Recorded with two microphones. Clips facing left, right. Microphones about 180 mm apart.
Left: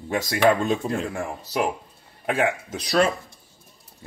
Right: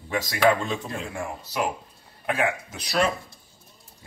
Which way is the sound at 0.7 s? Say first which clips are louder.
Left 6 dB; 35° left (ahead or behind).